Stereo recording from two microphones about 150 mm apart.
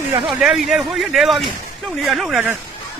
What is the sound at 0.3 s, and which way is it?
Speech, centre (ahead or behind).